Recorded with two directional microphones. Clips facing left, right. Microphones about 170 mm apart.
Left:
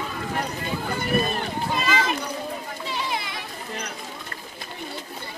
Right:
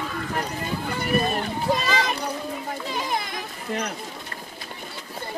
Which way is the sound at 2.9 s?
45° right (ahead or behind).